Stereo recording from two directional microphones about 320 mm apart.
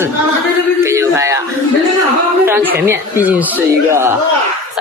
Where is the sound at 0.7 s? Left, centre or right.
Centre.